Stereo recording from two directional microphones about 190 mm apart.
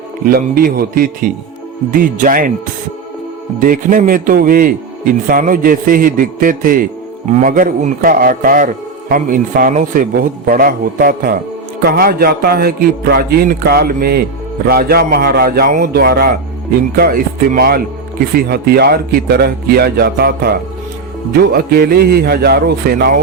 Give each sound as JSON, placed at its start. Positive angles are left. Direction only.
{"t": 0.3, "sound": "a man's voice", "side_deg": -50}
{"t": 3.6, "sound": "a man's voice", "side_deg": -45}
{"t": 21.5, "sound": "speech", "side_deg": -55}